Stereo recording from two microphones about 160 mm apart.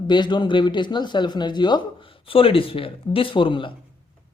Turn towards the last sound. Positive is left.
turn(degrees=30)  # may be behind; listen again after turning